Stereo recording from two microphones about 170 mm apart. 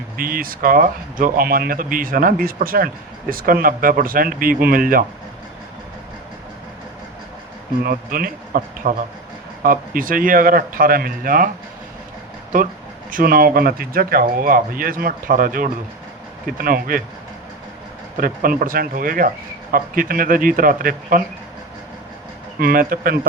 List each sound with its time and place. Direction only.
0.2 s speech: 55° right (ahead or behind)
7.9 s speech: 55° right (ahead or behind)
13.1 s speech: 55° right (ahead or behind)
18.2 s speech: 55° right (ahead or behind)
22.6 s speech: 55° right (ahead or behind)